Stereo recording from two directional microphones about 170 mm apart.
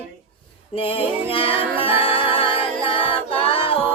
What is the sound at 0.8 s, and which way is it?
Music, 30° left (ahead or behind).